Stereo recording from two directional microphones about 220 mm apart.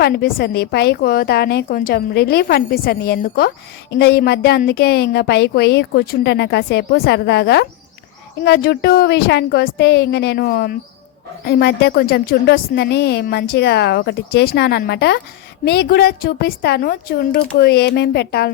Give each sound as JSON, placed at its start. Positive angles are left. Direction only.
{"t": 0.0, "sound": "a woman's voice", "side_deg": 45}